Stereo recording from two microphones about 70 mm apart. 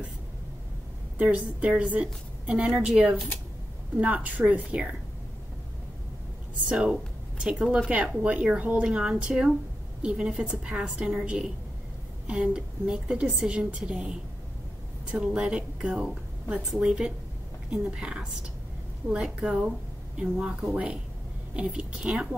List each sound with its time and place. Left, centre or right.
1.1 s a woman's voice: centre
3.9 s a woman's voice: right
6.7 s a woman's voice: centre